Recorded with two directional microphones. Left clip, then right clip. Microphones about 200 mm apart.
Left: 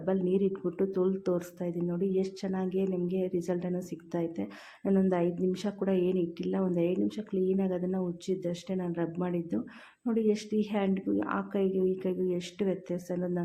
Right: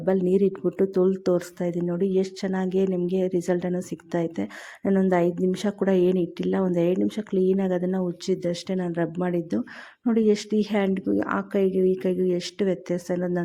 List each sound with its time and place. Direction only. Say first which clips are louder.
0.0 s speech: right 7 dB; 40° right (ahead or behind)